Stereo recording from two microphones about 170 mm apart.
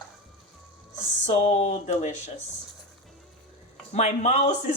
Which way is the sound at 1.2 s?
40° left (ahead or behind).